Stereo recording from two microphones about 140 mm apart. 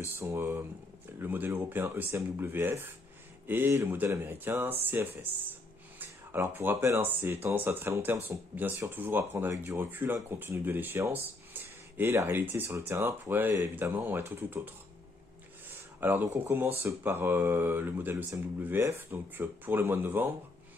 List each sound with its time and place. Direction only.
0.2 s speech: 15° right (ahead or behind)
16.0 s speech: 15° right (ahead or behind)